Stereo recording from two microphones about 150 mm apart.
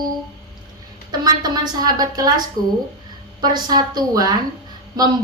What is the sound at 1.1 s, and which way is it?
A woman's voice, 30° right (ahead or behind).